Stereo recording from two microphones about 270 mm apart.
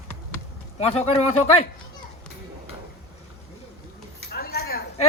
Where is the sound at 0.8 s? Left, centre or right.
Left.